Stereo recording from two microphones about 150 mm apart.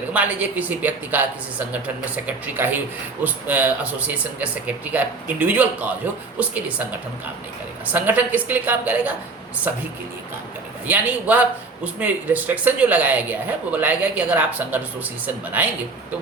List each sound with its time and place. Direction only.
0.1 s speech: 10° right (ahead or behind)
7.9 s speech: 10° right (ahead or behind)
10.8 s speech: 10° right (ahead or behind)